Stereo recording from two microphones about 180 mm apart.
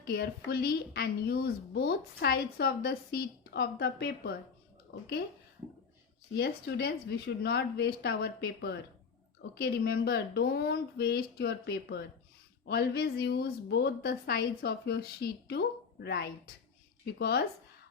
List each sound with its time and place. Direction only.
0.0 s a woman's voice: 60° left (ahead or behind)
6.3 s a woman's voice: 60° left (ahead or behind)